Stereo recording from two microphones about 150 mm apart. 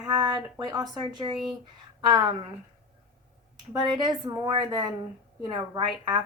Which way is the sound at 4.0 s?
25° right (ahead or behind).